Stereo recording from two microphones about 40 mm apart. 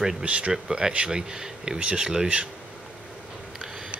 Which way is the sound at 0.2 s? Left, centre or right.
Right.